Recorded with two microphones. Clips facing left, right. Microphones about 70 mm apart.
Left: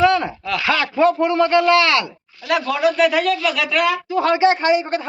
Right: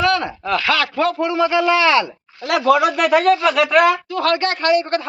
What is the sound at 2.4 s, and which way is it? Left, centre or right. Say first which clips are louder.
Speech: right 3 dB; right.